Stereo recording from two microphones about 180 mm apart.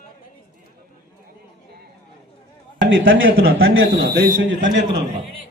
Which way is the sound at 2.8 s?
90° right.